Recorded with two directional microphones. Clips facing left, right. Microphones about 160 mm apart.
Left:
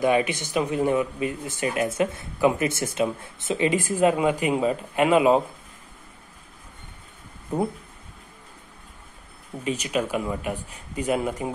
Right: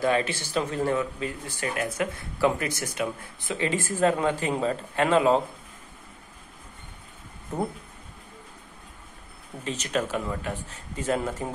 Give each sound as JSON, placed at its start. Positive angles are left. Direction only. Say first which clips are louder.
{"t": 0.0, "sound": "speech", "louder": "left 3 dB", "side_deg": 15}
{"t": 7.5, "sound": "speech", "louder": "left 4 dB", "side_deg": 10}
{"t": 9.7, "sound": "speech", "louder": "left 3 dB", "side_deg": 10}